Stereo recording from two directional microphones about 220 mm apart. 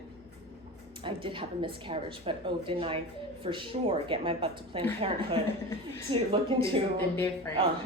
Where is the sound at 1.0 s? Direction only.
20° right (ahead or behind).